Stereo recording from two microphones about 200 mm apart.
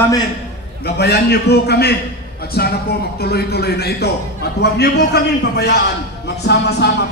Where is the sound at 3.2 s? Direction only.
55° left (ahead or behind).